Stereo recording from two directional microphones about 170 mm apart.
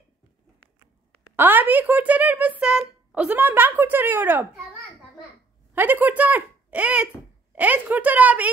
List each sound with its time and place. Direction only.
1.3 s speech: 10° right (ahead or behind)
5.8 s speech: 10° right (ahead or behind)